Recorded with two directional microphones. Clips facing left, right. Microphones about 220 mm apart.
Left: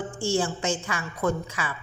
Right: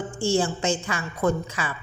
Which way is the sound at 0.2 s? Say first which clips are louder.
Right 3 dB; 25° right (ahead or behind).